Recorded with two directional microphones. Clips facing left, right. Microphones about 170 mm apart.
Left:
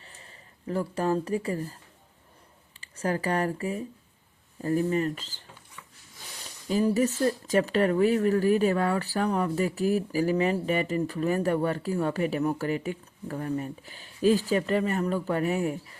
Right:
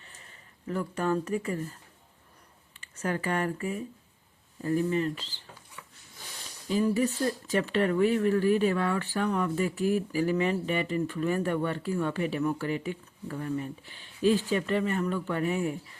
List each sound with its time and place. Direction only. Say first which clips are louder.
0.0 s speech: left 3 dB; 35° left (ahead or behind)
2.8 s speech: left 3 dB; 30° left (ahead or behind)
6.7 s speech: left 2 dB; 40° left (ahead or behind)